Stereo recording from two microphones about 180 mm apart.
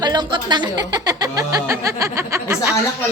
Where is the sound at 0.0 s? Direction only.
25° right (ahead or behind).